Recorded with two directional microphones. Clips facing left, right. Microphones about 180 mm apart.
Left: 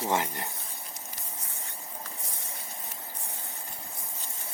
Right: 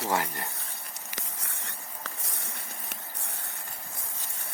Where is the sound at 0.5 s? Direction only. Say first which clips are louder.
Even; 80° right; by 2.8 s 65° right (ahead or behind).